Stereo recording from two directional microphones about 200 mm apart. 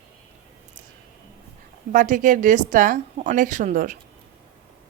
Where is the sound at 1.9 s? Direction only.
40° right (ahead or behind).